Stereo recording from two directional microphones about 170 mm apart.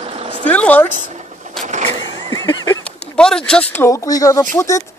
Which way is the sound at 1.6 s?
40° right (ahead or behind).